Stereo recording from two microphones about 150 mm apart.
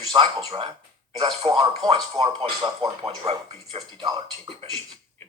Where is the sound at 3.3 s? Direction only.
40° right (ahead or behind).